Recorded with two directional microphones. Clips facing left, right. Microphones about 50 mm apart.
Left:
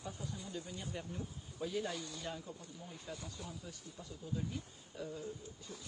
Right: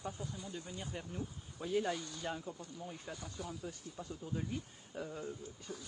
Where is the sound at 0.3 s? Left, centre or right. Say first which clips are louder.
Even; centre.